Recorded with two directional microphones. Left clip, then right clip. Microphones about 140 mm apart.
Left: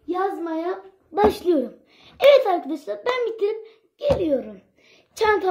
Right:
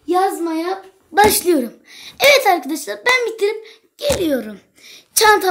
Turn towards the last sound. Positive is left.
turn(degrees=-20)  # may be behind; listen again after turning